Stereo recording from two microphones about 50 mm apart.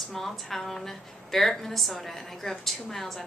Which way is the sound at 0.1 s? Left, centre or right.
Centre.